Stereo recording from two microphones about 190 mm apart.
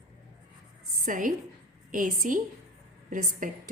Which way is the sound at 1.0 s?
45° right (ahead or behind).